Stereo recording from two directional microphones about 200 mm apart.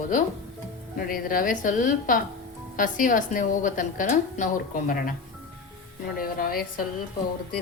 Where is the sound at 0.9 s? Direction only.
45° left (ahead or behind).